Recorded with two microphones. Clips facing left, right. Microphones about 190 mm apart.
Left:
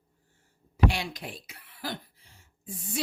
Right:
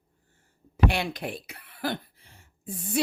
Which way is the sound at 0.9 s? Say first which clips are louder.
Right 3 dB; 60° right (ahead or behind).